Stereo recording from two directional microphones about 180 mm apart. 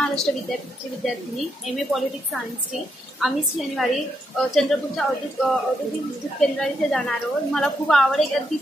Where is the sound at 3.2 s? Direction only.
Centre (ahead or behind).